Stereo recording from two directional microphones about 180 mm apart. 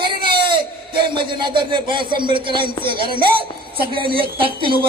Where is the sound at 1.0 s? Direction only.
25° right (ahead or behind).